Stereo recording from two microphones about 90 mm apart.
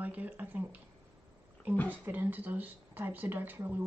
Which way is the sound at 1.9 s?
20° right (ahead or behind).